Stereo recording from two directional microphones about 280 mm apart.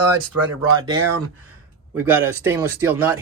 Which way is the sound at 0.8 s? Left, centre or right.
Centre.